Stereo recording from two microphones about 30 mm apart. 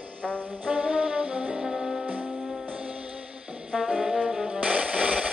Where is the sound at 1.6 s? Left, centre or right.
Centre.